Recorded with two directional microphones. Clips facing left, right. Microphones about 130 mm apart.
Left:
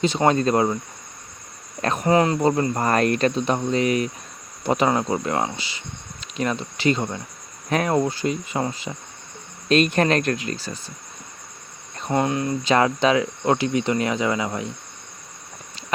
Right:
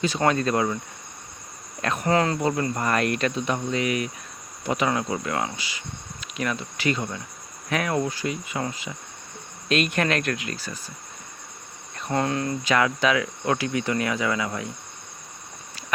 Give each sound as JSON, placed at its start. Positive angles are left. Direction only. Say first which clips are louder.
{"t": 0.0, "sound": "cricket", "louder": "left 4 dB", "side_deg": 25}
{"t": 1.8, "sound": "cricket", "louder": "left 3 dB", "side_deg": 35}
{"t": 2.0, "sound": "cricket", "louder": "left 4 dB", "side_deg": 20}
{"t": 2.4, "sound": "cricket", "louder": "left 4 dB", "side_deg": 30}
{"t": 11.9, "sound": "cricket", "louder": "left 3 dB", "side_deg": 20}